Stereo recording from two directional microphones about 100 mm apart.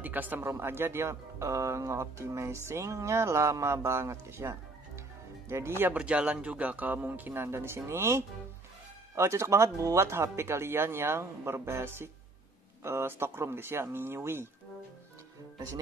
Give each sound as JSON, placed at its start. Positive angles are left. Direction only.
{"t": 0.0, "sound": "speech", "side_deg": -15}
{"t": 5.8, "sound": "speech", "side_deg": -15}